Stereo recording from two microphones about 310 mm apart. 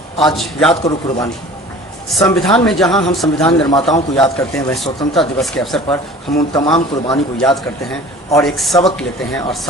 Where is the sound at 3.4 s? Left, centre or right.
Centre.